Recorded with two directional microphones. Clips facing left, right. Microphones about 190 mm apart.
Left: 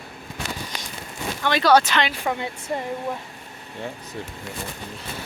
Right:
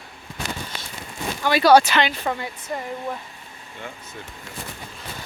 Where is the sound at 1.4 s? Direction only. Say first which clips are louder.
Right 3 dB; 10° right (ahead or behind).